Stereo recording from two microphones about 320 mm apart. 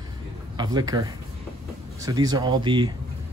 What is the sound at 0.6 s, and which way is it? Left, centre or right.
Speech, centre.